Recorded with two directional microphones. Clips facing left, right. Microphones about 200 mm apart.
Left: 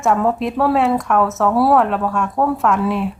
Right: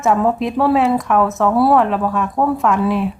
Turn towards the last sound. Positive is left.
turn(degrees=0)  # may be behind; listen again after turning